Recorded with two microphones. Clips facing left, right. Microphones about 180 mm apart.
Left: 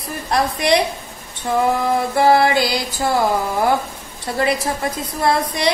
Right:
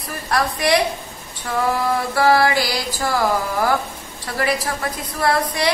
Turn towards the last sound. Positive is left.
turn(degrees=25)  # may be behind; listen again after turning